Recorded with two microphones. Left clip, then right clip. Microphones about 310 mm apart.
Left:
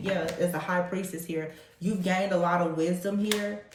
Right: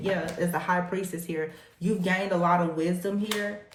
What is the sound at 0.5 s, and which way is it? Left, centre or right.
Speech, right.